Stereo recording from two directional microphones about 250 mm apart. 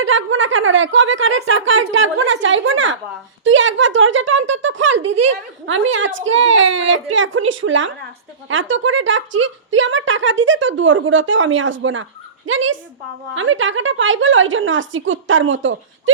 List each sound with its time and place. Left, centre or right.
0.0 s a woman's voice: right